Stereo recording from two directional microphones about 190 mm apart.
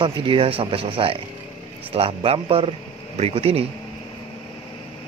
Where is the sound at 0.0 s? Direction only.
25° right (ahead or behind).